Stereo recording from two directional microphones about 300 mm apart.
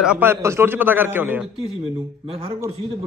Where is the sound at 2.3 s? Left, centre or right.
Centre.